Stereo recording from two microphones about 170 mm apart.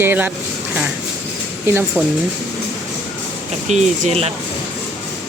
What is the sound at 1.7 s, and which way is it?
Speech, 10° right (ahead or behind).